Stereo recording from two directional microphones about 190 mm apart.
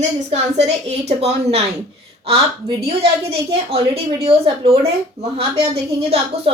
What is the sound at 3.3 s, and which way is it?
A woman's voice, 30° right (ahead or behind).